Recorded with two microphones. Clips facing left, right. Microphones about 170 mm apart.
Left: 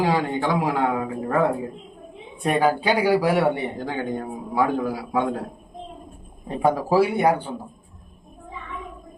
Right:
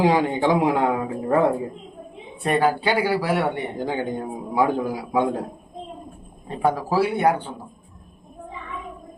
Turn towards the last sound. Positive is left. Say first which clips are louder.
# left 1 dB
turn(degrees=10)  # may be behind; listen again after turning